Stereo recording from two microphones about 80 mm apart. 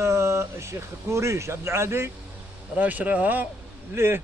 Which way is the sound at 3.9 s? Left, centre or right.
Right.